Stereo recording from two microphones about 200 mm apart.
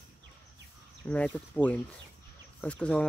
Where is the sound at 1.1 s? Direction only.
5° left (ahead or behind).